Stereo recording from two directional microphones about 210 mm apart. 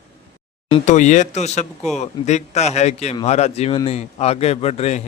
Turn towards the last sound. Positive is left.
turn(degrees=30)  # may be behind; listen again after turning